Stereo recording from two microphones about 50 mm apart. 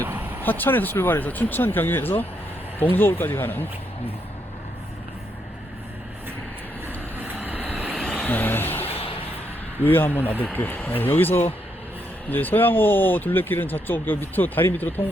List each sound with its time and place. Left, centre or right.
0.4 s speech: left
6.8 s vehicle: right
8.3 s vehicle: left
9.8 s speech: left